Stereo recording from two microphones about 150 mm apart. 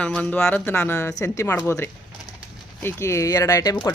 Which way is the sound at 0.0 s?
10° left (ahead or behind).